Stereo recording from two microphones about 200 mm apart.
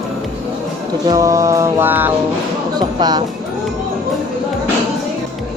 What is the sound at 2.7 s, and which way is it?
Speech, 20° right (ahead or behind).